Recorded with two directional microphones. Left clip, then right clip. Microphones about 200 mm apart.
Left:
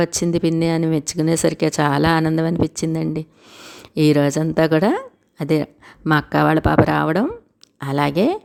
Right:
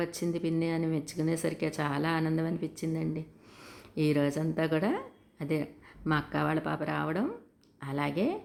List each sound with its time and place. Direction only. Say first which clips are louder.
0.0 s speech: left 13 dB; 45° left (ahead or behind)